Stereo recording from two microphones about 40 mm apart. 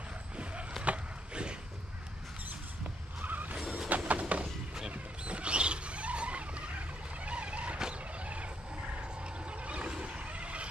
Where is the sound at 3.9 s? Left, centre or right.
Right.